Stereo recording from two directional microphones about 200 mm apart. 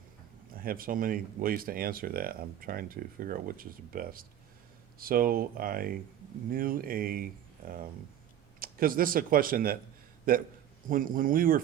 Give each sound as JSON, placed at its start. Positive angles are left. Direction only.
{"t": 0.5, "sound": "speech", "side_deg": -45}
{"t": 8.5, "sound": "speech", "side_deg": -45}